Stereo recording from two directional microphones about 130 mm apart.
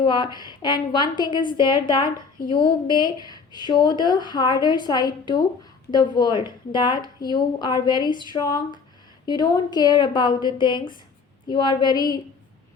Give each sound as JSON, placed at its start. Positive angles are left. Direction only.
{"t": 0.0, "sound": "a woman's voice", "side_deg": 35}